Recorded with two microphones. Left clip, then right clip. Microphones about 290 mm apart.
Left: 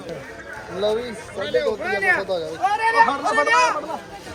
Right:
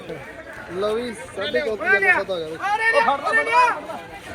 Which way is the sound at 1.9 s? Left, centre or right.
Right.